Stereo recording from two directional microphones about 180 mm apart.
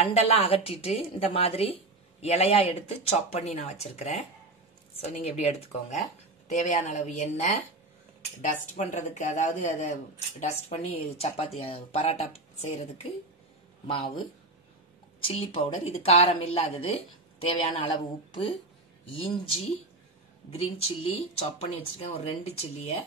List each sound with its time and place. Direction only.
0.0 s speech: 35° left (ahead or behind)
8.7 s speech: 45° left (ahead or behind); by 14.2 s 30° left (ahead or behind)
15.2 s speech: 30° left (ahead or behind)
19.1 s speech: 30° left (ahead or behind)